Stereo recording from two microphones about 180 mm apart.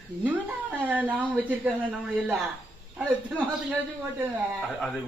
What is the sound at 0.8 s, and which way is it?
Speech, 10° right (ahead or behind).